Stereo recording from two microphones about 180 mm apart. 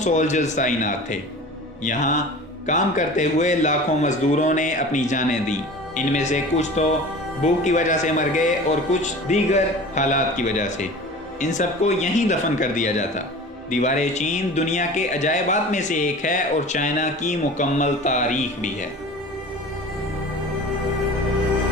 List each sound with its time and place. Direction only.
0.0 s speech: 40° left (ahead or behind)